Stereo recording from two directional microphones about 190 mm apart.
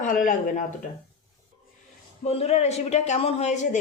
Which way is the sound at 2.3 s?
35° left (ahead or behind).